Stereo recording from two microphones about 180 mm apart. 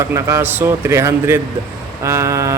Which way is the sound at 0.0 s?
15° right (ahead or behind).